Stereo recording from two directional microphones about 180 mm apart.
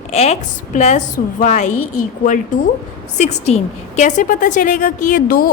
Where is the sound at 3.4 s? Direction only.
40° left (ahead or behind).